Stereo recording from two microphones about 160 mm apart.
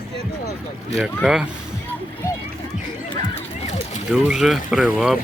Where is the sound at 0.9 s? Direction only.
5° right (ahead or behind).